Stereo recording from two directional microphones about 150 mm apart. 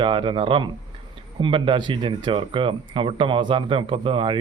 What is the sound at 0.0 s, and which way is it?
Speech, 35° right (ahead or behind).